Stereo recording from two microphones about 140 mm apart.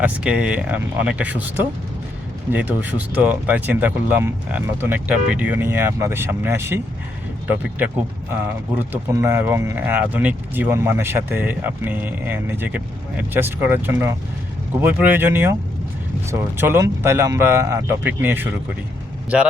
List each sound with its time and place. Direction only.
0.0 s speech: 10° right (ahead or behind)